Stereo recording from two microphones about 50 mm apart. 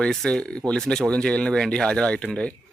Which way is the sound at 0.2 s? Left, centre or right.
Centre.